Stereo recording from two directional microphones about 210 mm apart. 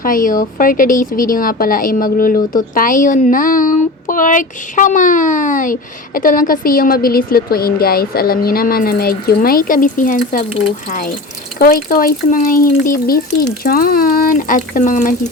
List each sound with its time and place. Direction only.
0.0 s a woman's voice: 40° left (ahead or behind)
11.6 s a woman's voice: 45° left (ahead or behind)